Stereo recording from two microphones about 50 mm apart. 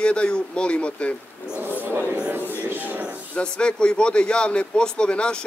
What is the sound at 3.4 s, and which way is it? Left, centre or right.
Speech, centre.